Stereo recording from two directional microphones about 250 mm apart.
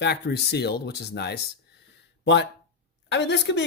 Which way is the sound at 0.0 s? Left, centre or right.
Left.